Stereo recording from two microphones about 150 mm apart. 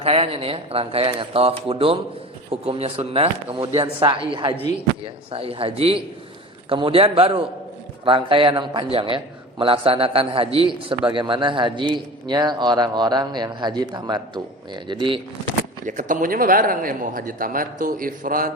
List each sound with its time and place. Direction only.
0.0 s a man's voice: 40° right (ahead or behind)
15.9 s speech: 60° right (ahead or behind)